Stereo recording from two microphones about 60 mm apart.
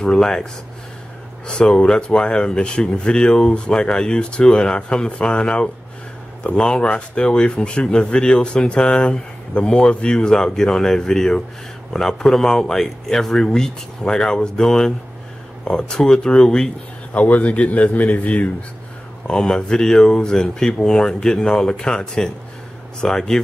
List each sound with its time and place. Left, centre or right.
0.0 s speech: centre
1.5 s speech: centre
17.1 s a man's voice: left
19.2 s speech: centre